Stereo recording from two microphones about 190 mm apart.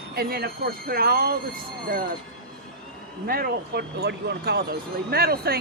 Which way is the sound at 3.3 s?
55° right (ahead or behind).